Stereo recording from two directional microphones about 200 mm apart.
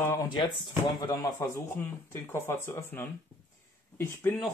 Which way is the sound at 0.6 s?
20° left (ahead or behind).